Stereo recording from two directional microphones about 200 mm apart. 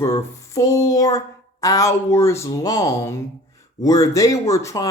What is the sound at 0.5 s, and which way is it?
Speech, 15° left (ahead or behind).